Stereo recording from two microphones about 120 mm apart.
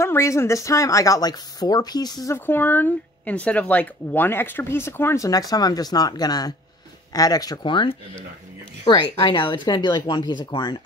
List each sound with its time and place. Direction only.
0.0 s speech: 20° left (ahead or behind)
2.3 s speech: 15° left (ahead or behind); by 10.8 s 40° left (ahead or behind)